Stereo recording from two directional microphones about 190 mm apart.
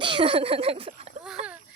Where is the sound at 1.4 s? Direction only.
30° right (ahead or behind).